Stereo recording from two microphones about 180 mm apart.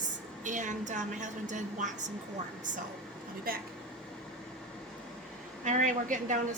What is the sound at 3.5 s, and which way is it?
Speech, 55° right (ahead or behind).